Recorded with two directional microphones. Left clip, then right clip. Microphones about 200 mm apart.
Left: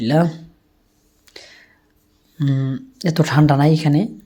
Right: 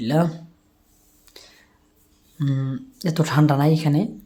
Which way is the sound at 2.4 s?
5° left (ahead or behind).